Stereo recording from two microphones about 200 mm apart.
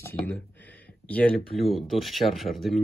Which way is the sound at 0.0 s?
10° left (ahead or behind).